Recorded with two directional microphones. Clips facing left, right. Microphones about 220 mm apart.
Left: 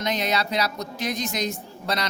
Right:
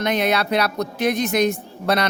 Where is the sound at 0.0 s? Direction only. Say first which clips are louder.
Right 5 dB; 60° right (ahead or behind).